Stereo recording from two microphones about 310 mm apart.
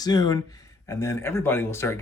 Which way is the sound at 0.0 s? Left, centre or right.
Centre.